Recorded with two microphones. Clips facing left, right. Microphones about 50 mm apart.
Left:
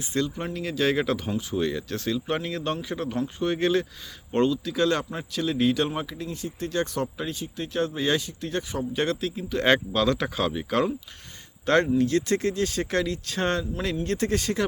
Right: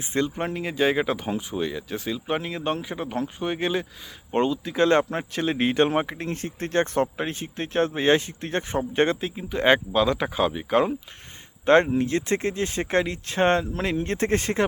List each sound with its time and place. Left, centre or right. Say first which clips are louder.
0.1 s speech: right 3 dB; right
9.2 s speech: right 2 dB; right